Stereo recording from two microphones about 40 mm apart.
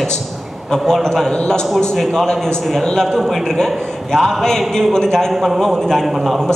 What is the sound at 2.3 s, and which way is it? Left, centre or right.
A man's voice, centre.